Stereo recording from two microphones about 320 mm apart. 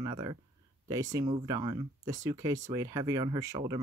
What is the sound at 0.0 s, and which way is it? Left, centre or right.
Speech, centre.